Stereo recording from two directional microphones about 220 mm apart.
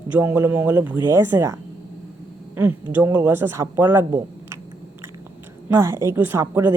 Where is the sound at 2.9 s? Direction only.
10° right (ahead or behind).